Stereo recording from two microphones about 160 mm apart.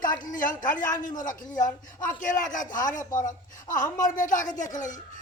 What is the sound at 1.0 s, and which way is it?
Speech, 55° left (ahead or behind).